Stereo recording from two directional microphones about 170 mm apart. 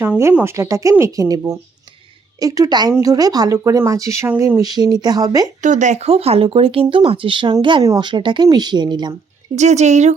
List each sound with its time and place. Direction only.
0.0 s speech: 15° right (ahead or behind)
5.6 s speech: 45° right (ahead or behind); by 9.1 s 25° right (ahead or behind)
9.6 s speech: 40° right (ahead or behind)